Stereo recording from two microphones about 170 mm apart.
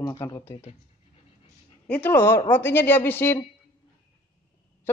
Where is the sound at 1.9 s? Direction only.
10° left (ahead or behind).